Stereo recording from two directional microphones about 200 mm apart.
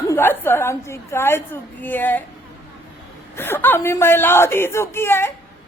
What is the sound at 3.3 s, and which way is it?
Speech, 10° left (ahead or behind).